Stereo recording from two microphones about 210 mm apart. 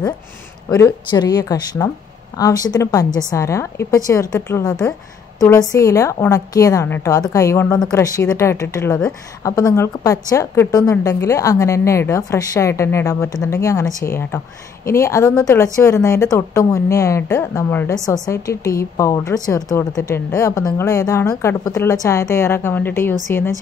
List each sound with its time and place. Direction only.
0.7 s a woman's voice: 15° left (ahead or behind)